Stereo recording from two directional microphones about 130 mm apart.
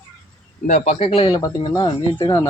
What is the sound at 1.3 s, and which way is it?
Speech, 30° left (ahead or behind).